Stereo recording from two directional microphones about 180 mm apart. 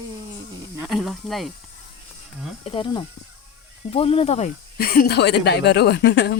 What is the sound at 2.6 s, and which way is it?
Speech, 30° left (ahead or behind).